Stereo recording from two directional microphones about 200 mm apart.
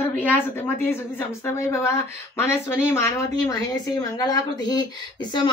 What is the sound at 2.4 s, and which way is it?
A woman's voice, 10° left (ahead or behind).